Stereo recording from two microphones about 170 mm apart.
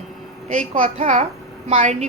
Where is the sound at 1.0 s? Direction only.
40° right (ahead or behind).